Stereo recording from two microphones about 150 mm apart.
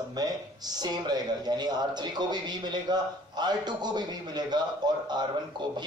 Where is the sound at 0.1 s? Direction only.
25° right (ahead or behind).